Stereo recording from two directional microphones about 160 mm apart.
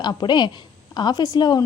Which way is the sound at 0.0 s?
25° left (ahead or behind).